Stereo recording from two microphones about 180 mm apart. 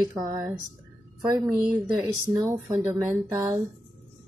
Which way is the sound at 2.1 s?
20° right (ahead or behind).